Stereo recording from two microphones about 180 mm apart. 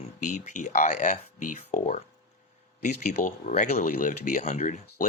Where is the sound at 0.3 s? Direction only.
40° left (ahead or behind).